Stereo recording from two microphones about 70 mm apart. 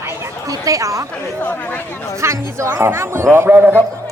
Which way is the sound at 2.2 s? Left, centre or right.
Right.